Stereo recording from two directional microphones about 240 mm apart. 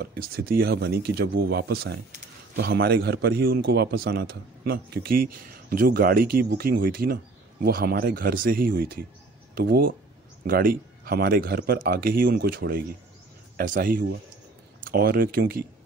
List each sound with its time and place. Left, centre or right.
0.0 s speech: right